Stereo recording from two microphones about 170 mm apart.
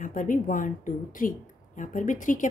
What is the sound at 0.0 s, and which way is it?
Speech, 50° left (ahead or behind).